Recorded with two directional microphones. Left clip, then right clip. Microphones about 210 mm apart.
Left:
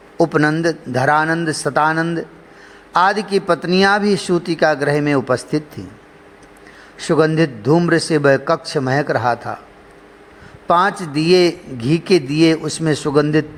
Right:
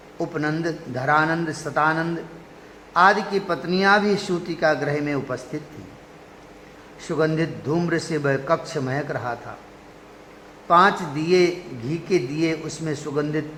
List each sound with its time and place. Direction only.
0.2 s a man's voice: 35° left (ahead or behind)
7.0 s a man's voice: 30° left (ahead or behind)
10.7 s a man's voice: 35° left (ahead or behind)